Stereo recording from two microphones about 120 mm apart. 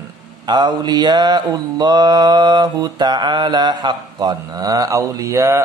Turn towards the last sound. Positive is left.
turn(degrees=-25)  # may be behind; listen again after turning